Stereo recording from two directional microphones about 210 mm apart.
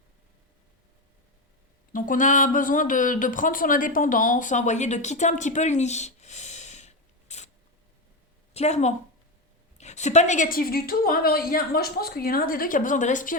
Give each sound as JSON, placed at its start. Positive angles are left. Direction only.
{"t": 1.9, "sound": "speech", "side_deg": 40}
{"t": 8.5, "sound": "a woman's voice", "side_deg": 30}